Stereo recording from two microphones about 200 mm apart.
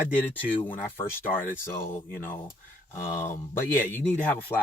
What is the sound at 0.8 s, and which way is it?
Speech, 10° left (ahead or behind).